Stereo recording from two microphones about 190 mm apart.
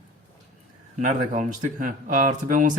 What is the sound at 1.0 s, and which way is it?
Speech, 40° right (ahead or behind).